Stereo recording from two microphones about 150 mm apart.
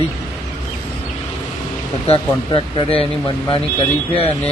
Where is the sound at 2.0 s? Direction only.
35° left (ahead or behind).